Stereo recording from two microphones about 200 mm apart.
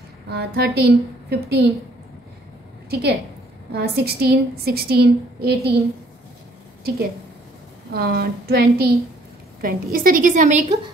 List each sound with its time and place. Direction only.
0.3 s a woman's voice: 55° right (ahead or behind)
2.9 s a woman's voice: 55° right (ahead or behind)
7.9 s a woman's voice: 50° right (ahead or behind)